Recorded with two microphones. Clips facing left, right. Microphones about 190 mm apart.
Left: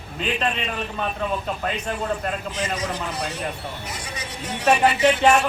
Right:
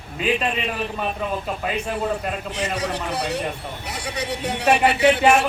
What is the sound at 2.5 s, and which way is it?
A man's voice, 70° right (ahead or behind).